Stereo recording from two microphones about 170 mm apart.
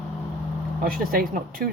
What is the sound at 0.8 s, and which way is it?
Speech, 55° right (ahead or behind).